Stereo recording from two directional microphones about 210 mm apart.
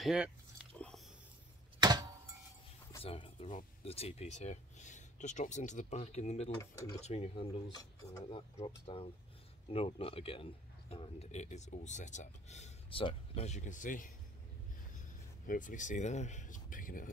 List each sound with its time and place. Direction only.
0.0 s speech: 5° right (ahead or behind)
0.7 s biting: 5° left (ahead or behind)
1.8 s a sound: 20° right (ahead or behind)
3.0 s a man's voice: 25° left (ahead or behind)
15.4 s a man's voice: 40° left (ahead or behind)